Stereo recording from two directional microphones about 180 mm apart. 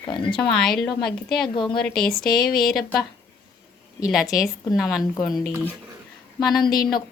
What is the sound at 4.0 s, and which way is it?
A woman's voice, 5° right (ahead or behind).